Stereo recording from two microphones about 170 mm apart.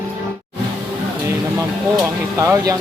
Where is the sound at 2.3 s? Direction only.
20° right (ahead or behind).